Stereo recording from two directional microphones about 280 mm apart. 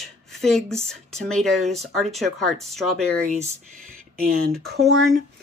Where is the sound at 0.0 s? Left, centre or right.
Centre.